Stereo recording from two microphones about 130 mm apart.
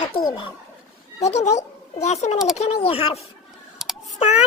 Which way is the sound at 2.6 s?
50° left (ahead or behind).